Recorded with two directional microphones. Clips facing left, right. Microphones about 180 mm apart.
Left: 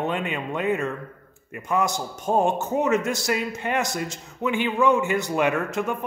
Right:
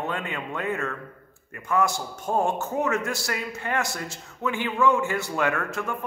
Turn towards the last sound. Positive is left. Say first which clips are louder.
# left 4 dB
turn(degrees=20)  # may be behind; listen again after turning